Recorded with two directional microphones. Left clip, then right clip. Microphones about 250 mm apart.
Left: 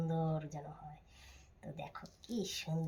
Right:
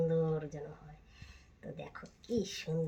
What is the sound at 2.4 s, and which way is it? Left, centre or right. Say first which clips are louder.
Speech: left 1 dB; left.